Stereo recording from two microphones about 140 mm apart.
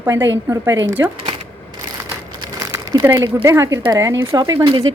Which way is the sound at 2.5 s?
25° right (ahead or behind).